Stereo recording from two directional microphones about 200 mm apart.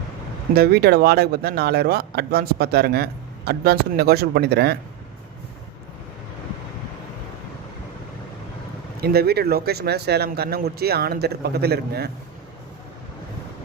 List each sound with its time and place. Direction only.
0.5 s speech: 50° right (ahead or behind)
9.0 s speech: 50° right (ahead or behind)